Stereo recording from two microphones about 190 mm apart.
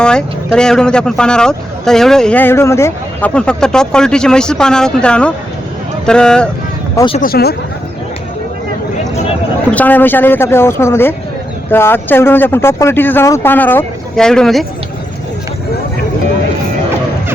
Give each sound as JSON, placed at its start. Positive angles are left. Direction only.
{"t": 0.0, "sound": "speech", "side_deg": 5}
{"t": 6.9, "sound": "speech", "side_deg": 25}
{"t": 7.2, "sound": "speech", "side_deg": 55}
{"t": 9.7, "sound": "speech", "side_deg": 10}